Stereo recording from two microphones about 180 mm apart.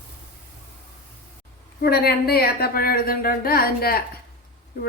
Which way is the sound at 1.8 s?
60° left (ahead or behind).